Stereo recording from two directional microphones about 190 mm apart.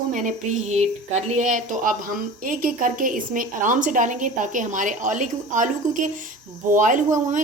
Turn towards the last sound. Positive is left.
turn(degrees=-40)  # may be behind; listen again after turning